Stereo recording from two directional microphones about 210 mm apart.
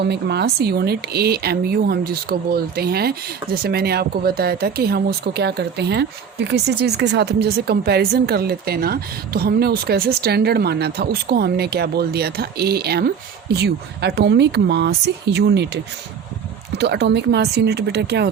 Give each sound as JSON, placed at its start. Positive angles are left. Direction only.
{"t": 0.0, "sound": "speech", "side_deg": -50}